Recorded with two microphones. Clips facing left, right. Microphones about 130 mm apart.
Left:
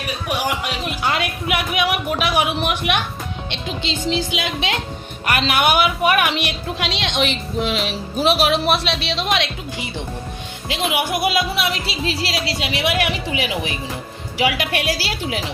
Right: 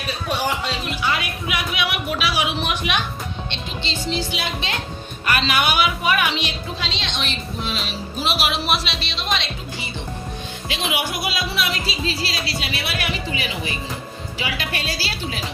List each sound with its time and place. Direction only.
0.3 s music: 10° left (ahead or behind)
1.2 s music: 60° left (ahead or behind)
4.4 s speech: 90° left
5.2 s speech: 60° left (ahead or behind)
8.4 s music: 55° left (ahead or behind); by 9.9 s 90° left
10.7 s music: 60° left (ahead or behind); by 13.7 s 80° left
14.7 s speech: 85° left